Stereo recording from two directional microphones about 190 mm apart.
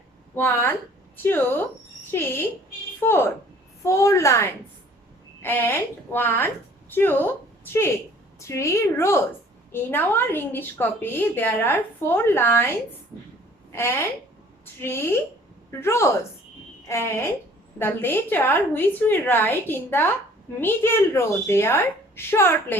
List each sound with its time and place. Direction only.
0.3 s a woman's voice: 10° left (ahead or behind)
13.7 s a woman's voice: 15° left (ahead or behind)